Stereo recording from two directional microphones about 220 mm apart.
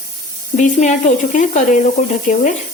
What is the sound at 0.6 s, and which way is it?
A woman's voice, 35° left (ahead or behind).